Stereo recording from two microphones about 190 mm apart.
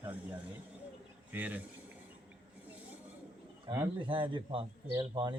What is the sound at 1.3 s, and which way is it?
Speech, 10° right (ahead or behind).